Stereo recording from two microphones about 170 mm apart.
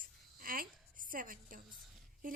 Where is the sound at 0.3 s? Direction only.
55° right (ahead or behind).